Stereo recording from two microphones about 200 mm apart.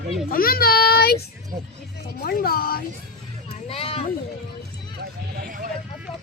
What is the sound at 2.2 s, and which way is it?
Speech, 50° left (ahead or behind).